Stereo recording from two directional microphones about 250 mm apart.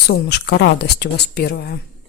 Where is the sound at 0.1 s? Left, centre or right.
Left.